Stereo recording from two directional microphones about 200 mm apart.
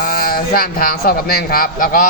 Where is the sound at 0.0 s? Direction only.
45° left (ahead or behind).